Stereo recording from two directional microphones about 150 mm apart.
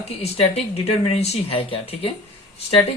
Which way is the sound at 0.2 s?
40° left (ahead or behind).